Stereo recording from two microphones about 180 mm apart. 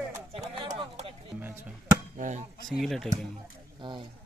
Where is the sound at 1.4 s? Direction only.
10° right (ahead or behind).